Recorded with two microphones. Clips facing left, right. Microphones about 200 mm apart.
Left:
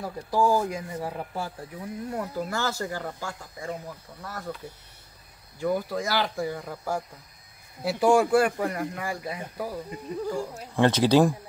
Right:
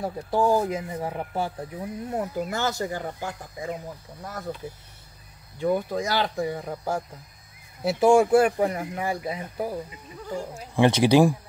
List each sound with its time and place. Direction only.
0.0 s speech: 20° right (ahead or behind)
5.6 s speech: 20° right (ahead or behind)
10.8 s speech: 10° right (ahead or behind)